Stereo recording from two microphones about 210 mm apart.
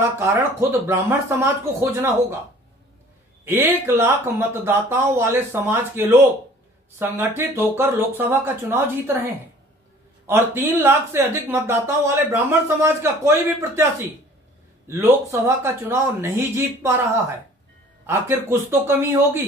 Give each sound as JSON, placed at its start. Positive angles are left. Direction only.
{"t": 0.0, "sound": "speech", "side_deg": -10}
{"t": 3.4, "sound": "speech", "side_deg": -10}